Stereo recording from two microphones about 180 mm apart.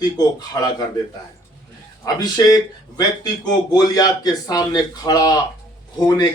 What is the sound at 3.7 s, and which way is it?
Speech, 20° left (ahead or behind).